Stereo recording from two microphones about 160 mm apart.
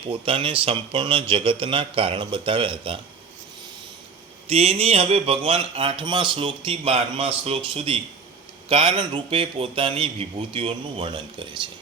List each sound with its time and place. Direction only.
0.1 s speech: 35° right (ahead or behind)
4.4 s speech: 40° right (ahead or behind)